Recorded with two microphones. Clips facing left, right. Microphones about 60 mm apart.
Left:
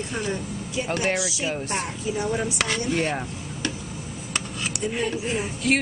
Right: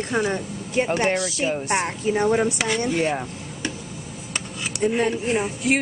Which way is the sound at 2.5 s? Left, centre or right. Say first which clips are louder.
Right 2 dB; centre.